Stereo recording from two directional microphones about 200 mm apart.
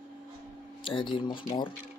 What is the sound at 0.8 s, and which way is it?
Speech, 25° left (ahead or behind).